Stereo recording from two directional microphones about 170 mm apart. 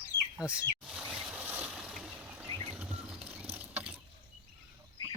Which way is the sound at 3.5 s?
10° right (ahead or behind).